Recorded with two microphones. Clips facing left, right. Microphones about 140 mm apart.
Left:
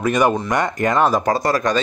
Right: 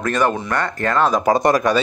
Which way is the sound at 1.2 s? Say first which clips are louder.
Right 3 dB; 15° right (ahead or behind).